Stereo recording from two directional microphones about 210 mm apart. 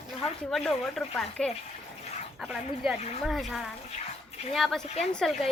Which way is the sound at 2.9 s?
30° left (ahead or behind).